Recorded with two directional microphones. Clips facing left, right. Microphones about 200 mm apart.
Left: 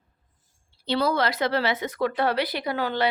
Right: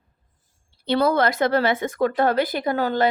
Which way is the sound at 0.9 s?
50° right (ahead or behind).